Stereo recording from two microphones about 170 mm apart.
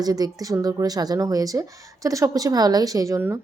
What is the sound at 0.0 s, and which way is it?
A woman's voice, 20° right (ahead or behind).